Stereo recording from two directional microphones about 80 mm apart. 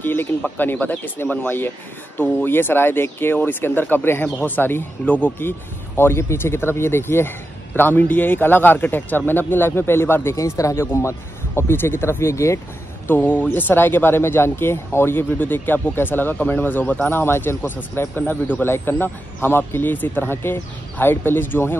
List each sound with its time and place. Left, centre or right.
0.0 s bird: left
0.4 s speech: left
10.3 s speech: left
13.0 s speech: left